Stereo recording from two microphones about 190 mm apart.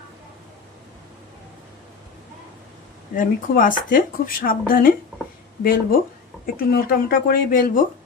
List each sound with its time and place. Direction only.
3.2 s speech: 45° left (ahead or behind)